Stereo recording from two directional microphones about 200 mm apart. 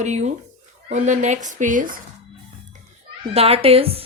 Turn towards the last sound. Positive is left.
turn(degrees=-30)  # may be behind; listen again after turning